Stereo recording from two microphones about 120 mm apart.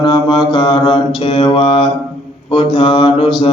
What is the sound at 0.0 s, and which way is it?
Mantra, 35° left (ahead or behind).